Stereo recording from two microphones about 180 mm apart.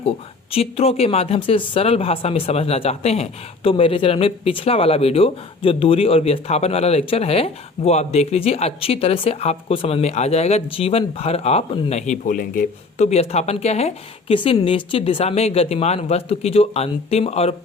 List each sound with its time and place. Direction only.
0.5 s speech: 35° left (ahead or behind)